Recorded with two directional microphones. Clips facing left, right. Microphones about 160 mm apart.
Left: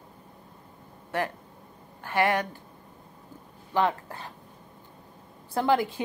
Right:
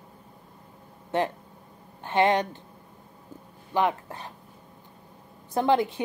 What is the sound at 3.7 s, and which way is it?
Speech, 15° right (ahead or behind).